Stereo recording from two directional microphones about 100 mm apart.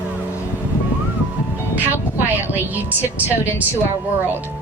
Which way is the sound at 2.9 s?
15° right (ahead or behind).